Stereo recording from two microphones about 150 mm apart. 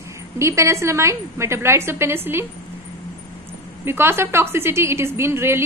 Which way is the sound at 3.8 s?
15° right (ahead or behind).